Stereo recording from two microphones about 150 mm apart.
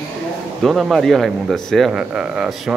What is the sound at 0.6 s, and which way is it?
Speech, centre (ahead or behind).